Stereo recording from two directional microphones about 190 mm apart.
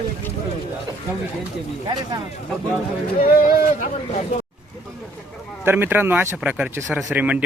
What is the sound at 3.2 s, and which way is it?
Speech, 50° left (ahead or behind).